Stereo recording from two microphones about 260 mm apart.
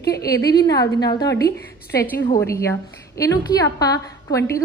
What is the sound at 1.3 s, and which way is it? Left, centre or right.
Speech, left.